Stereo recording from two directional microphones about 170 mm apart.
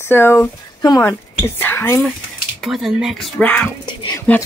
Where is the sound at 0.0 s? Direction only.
15° left (ahead or behind).